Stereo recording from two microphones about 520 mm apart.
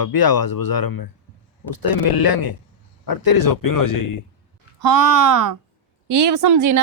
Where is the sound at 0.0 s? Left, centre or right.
Left.